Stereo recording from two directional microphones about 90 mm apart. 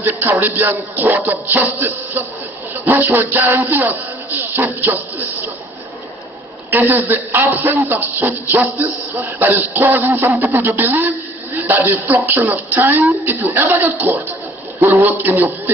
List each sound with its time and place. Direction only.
0.0 s speech: 20° right (ahead or behind)
6.7 s speech: 20° right (ahead or behind)